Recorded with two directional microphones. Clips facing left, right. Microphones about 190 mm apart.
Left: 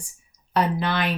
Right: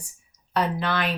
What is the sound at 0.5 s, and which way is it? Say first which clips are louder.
Speech: left 2 dB; 20° left (ahead or behind).